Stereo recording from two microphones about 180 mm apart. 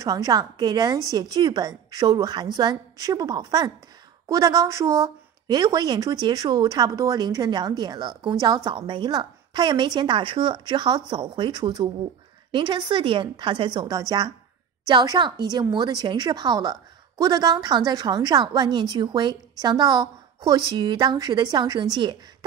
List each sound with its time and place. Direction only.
0.0 s speech: 20° right (ahead or behind)